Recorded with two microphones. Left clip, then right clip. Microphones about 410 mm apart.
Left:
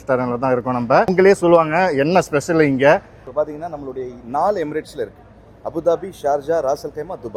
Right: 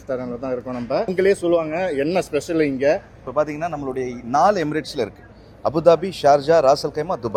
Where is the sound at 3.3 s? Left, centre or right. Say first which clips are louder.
Right 1 dB; right.